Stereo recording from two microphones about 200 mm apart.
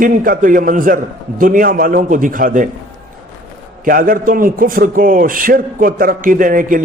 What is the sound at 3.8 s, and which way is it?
A man's voice, 45° right (ahead or behind).